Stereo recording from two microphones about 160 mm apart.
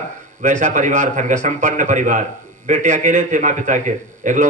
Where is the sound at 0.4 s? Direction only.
50° right (ahead or behind).